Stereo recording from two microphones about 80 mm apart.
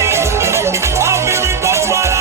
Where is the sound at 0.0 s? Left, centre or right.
Right.